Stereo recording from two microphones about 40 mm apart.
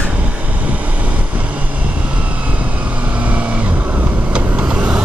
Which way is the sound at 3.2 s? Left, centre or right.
Right.